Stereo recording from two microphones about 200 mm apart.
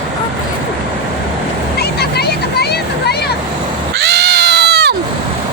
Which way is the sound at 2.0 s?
55° left (ahead or behind).